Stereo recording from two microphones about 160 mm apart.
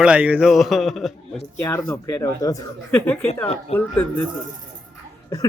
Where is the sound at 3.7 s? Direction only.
10° left (ahead or behind).